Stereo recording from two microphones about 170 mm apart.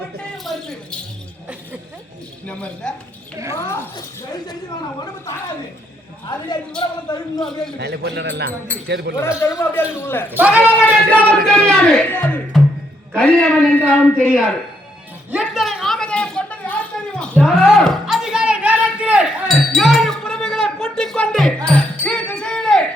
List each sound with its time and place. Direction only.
0.3 s a sound: centre (ahead or behind)
2.5 s a man's voice: 10° left (ahead or behind)
6.2 s a man's voice: 25° left (ahead or behind)
7.8 s a man's voice: 75° right (ahead or behind)
9.4 s a man's voice: 15° left (ahead or behind)
10.2 s a man's voice: 10° right (ahead or behind)
11.1 s a man's voice: 10° left (ahead or behind)
15.3 s a sound: 5° right (ahead or behind)